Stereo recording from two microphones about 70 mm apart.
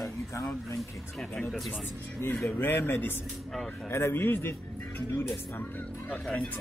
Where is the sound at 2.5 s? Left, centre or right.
Left.